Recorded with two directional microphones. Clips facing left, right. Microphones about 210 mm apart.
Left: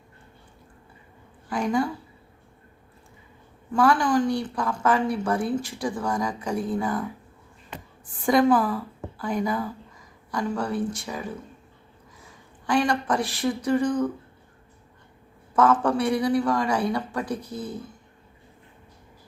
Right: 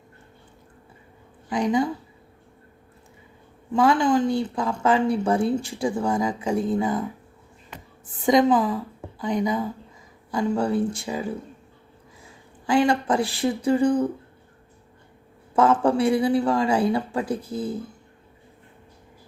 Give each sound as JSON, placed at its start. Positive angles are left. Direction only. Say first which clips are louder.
{"t": 1.5, "sound": "a woman's voice", "louder": "right 2 dB", "side_deg": -20}
{"t": 3.7, "sound": "speech", "louder": "right 2 dB", "side_deg": -20}
{"t": 8.0, "sound": "a woman's voice", "louder": "right 1 dB", "side_deg": -20}
{"t": 12.6, "sound": "speech", "louder": "right 3 dB", "side_deg": -25}
{"t": 15.5, "sound": "speech", "louder": "right 2 dB", "side_deg": -25}